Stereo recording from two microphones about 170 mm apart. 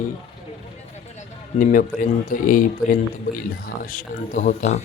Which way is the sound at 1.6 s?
50° left (ahead or behind).